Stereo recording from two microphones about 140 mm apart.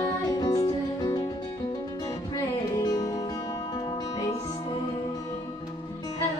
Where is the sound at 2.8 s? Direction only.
30° left (ahead or behind).